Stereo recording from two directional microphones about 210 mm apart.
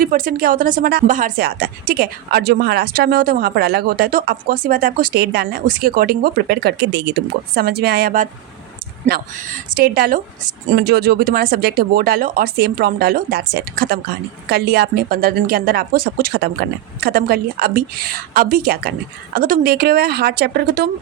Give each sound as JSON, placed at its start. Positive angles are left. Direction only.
{"t": 0.0, "sound": "speech", "side_deg": -40}